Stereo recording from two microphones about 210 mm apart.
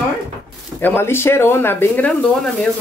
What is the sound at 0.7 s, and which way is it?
Speech, 10° left (ahead or behind).